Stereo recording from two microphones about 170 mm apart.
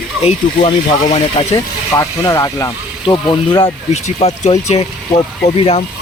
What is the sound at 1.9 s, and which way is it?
Speech, 20° left (ahead or behind).